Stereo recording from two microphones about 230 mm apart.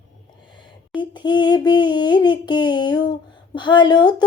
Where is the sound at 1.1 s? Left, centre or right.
Centre.